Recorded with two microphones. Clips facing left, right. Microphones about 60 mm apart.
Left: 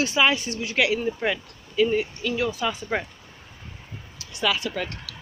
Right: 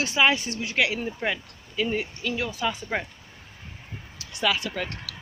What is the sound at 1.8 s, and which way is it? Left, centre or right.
Speech, right.